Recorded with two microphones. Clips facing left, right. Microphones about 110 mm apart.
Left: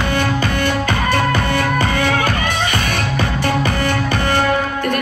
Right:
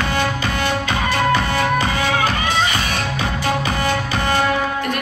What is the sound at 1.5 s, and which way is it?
Music, 55° left (ahead or behind).